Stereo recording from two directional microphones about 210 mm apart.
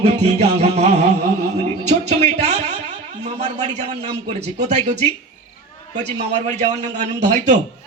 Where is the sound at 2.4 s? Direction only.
30° right (ahead or behind).